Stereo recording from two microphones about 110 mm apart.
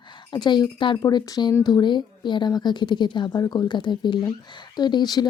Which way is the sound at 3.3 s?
35° left (ahead or behind).